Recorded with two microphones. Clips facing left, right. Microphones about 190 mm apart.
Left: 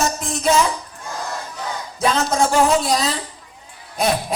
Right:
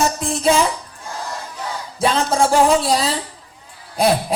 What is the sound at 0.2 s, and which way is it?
Music, 30° right (ahead or behind).